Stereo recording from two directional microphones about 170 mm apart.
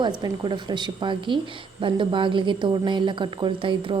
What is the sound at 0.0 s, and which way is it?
A woman's voice, 25° right (ahead or behind).